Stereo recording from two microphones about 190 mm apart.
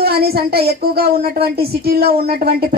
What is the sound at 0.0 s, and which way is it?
Speech, 55° right (ahead or behind).